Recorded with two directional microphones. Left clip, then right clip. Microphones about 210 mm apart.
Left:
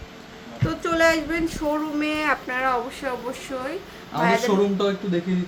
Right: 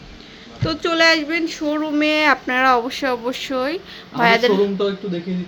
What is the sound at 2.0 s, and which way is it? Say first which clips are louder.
Speech: right 7 dB; 35° right (ahead or behind).